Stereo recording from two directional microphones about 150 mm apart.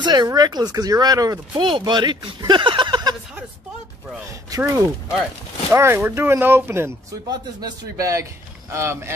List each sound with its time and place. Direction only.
0.0 s speech: 30° right (ahead or behind)
4.5 s speech: 20° right (ahead or behind)